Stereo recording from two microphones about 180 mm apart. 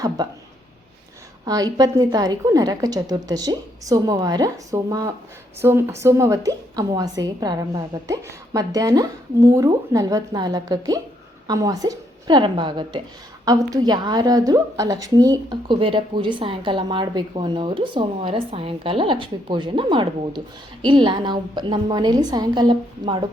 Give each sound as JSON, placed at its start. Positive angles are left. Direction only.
{"t": 1.5, "sound": "a woman's voice", "side_deg": -20}